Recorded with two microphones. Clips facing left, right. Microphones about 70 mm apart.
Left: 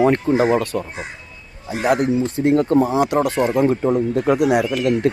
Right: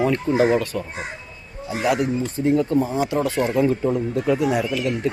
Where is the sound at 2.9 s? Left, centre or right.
Left.